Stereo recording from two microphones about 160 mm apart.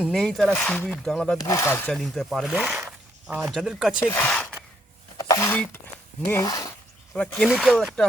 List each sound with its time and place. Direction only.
0.0 s speech: centre (ahead or behind)
1.4 s speech: 20° left (ahead or behind)
1.9 s speech: centre (ahead or behind)
2.8 s speech: 15° right (ahead or behind)
4.1 s speech: 10° left (ahead or behind)
7.1 s speech: centre (ahead or behind)